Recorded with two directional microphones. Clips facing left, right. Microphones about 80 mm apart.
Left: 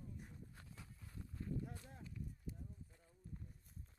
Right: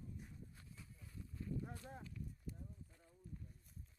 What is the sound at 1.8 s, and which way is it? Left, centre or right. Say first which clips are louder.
Speech: right 5 dB; right.